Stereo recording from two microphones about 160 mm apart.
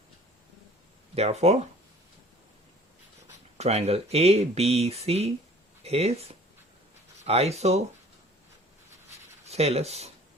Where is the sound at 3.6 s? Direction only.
40° right (ahead or behind).